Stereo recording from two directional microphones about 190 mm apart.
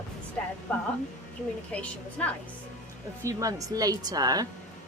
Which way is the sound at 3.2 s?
15° right (ahead or behind).